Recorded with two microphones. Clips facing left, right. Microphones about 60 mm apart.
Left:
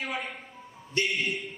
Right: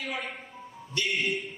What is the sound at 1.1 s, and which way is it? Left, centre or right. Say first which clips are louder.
Speech: right 1 dB; right.